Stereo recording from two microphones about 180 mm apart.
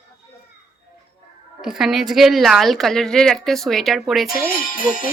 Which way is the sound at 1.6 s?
Centre (ahead or behind).